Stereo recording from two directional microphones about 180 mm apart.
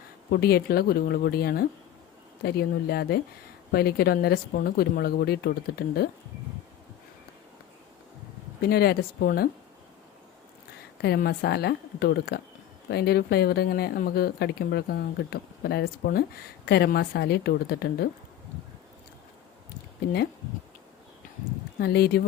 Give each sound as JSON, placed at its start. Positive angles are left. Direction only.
{"t": 0.3, "sound": "speech", "side_deg": 60}
{"t": 8.7, "sound": "speech", "side_deg": 60}
{"t": 11.0, "sound": "speech", "side_deg": 65}
{"t": 21.8, "sound": "speech", "side_deg": 60}